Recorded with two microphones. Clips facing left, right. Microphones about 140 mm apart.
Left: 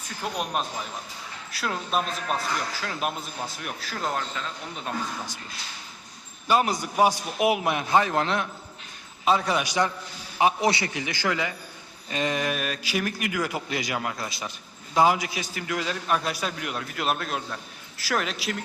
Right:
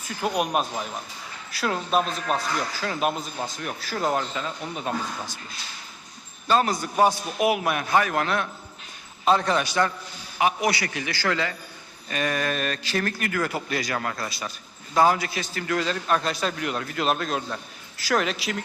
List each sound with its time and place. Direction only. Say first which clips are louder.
0.2 s a man's voice: right 5 dB; 5° right (ahead or behind)
6.5 s a man's voice: right 1 dB; 15° left (ahead or behind)
9.2 s speech: right 2 dB; 5° left (ahead or behind)
10.3 s a man's voice: left 1 dB; 25° left (ahead or behind)
12.5 s a man's voice: right 2 dB; 5° left (ahead or behind)